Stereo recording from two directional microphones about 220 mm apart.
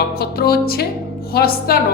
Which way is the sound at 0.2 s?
45° left (ahead or behind).